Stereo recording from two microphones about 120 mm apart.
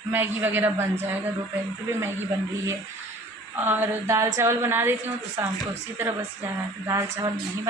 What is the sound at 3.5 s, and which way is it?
A man's voice, 15° right (ahead or behind).